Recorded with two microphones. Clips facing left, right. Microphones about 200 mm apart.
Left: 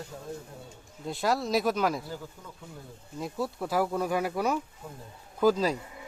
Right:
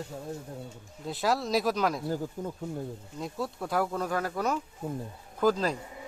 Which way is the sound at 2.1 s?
45° right (ahead or behind).